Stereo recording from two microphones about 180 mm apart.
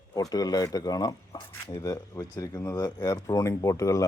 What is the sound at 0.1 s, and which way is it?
Speech, 20° left (ahead or behind).